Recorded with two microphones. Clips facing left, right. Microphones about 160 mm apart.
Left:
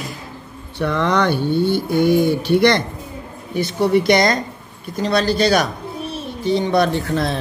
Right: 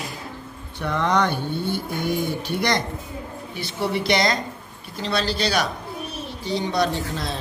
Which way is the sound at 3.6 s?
45° left (ahead or behind).